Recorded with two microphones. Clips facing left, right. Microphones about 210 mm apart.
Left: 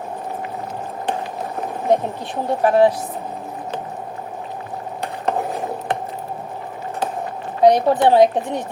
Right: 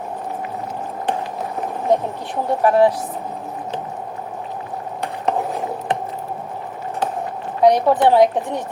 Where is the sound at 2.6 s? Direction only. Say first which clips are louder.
Even; 25° left (ahead or behind).